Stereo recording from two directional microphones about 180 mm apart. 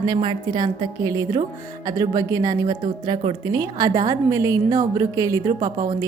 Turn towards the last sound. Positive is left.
turn(degrees=-25)  # may be behind; listen again after turning